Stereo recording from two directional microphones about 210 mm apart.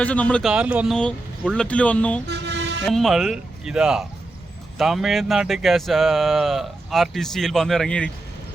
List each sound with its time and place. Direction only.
0.0 s a man's voice: 5° left (ahead or behind)
0.5 s speech: 5° right (ahead or behind)
2.2 s vehicle: 55° right (ahead or behind)
2.8 s speech: centre (ahead or behind)